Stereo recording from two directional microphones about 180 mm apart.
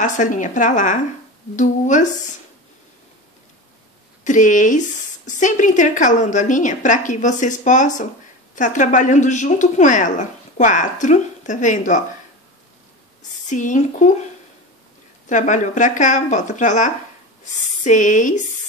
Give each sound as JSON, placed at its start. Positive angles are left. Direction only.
{"t": 0.0, "sound": "a woman's voice", "side_deg": 45}
{"t": 4.2, "sound": "a woman's voice", "side_deg": 45}
{"t": 13.5, "sound": "a woman's voice", "side_deg": 45}
{"t": 15.2, "sound": "a woman's voice", "side_deg": 45}